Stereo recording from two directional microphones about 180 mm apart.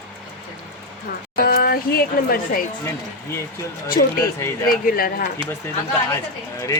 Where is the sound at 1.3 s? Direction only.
55° left (ahead or behind).